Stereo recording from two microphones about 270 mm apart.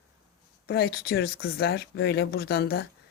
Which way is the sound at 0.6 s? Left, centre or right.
Left.